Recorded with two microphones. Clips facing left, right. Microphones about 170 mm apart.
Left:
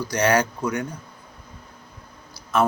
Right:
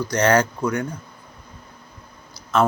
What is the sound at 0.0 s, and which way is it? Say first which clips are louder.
Speech: right 2 dB; 15° left (ahead or behind).